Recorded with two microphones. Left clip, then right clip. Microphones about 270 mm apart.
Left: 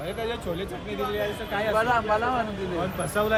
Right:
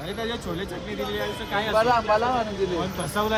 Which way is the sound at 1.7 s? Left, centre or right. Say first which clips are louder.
Right 3 dB; right.